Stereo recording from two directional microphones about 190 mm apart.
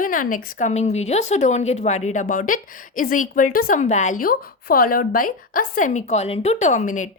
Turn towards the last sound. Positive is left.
turn(degrees=40)  # may be behind; listen again after turning